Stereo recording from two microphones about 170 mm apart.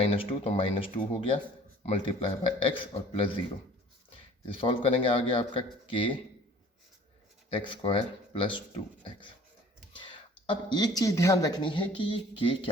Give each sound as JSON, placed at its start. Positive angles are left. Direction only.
{"t": 0.0, "sound": "speech", "side_deg": 35}
{"t": 4.5, "sound": "speech", "side_deg": 35}
{"t": 7.5, "sound": "speech", "side_deg": 30}
{"t": 9.9, "sound": "speech", "side_deg": 30}